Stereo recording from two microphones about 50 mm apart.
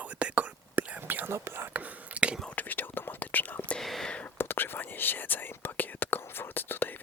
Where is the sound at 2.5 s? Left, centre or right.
Left.